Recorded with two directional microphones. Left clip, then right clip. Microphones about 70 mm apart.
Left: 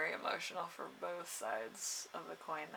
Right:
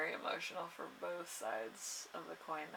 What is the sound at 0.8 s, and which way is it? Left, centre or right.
Speech, left.